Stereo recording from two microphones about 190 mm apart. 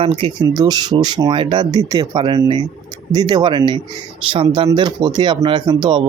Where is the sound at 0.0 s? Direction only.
30° right (ahead or behind).